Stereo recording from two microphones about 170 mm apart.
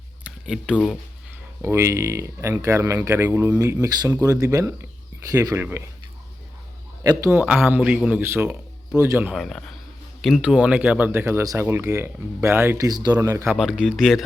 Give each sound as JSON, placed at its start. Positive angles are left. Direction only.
{"t": 0.3, "sound": "a sound", "side_deg": -5}
{"t": 1.6, "sound": "speech", "side_deg": -15}
{"t": 7.0, "sound": "speech", "side_deg": -20}
{"t": 9.3, "sound": "speech", "side_deg": 0}
{"t": 13.6, "sound": "speech", "side_deg": -5}